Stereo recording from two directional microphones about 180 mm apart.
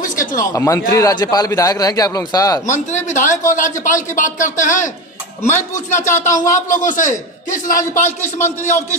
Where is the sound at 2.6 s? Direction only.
40° left (ahead or behind).